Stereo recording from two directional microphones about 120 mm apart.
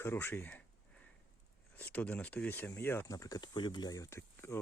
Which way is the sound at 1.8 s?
15° left (ahead or behind).